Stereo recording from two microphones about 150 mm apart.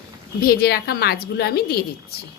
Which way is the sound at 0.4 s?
90° left.